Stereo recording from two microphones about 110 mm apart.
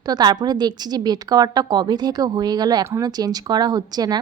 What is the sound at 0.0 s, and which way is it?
A woman's voice, 40° right (ahead or behind).